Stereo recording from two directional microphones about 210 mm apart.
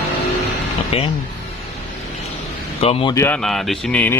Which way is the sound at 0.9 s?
30° left (ahead or behind).